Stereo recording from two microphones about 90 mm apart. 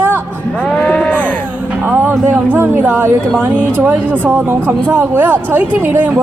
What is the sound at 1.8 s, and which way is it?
Speech, 20° right (ahead or behind).